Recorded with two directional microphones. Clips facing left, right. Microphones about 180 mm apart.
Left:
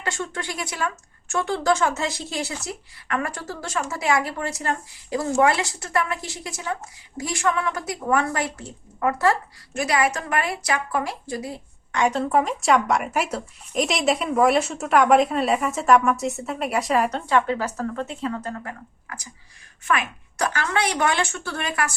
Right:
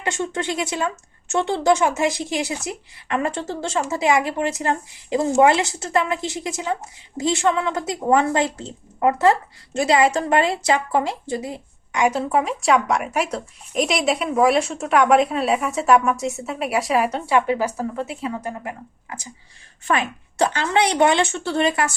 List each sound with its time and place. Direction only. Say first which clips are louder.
0.0 s speech: right 5 dB; 20° right (ahead or behind)
11.9 s speech: right 1 dB; 10° right (ahead or behind)